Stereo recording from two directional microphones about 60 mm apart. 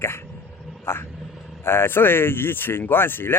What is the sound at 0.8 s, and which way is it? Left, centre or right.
Wild animals, left.